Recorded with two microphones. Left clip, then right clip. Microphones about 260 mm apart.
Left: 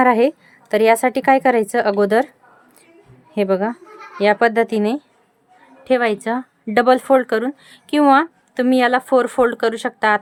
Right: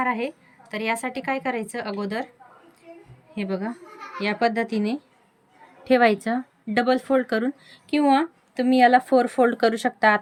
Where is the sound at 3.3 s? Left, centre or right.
Centre.